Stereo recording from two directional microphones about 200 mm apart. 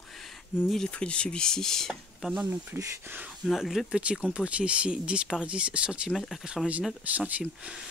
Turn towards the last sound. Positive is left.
turn(degrees=-5)  # may be behind; listen again after turning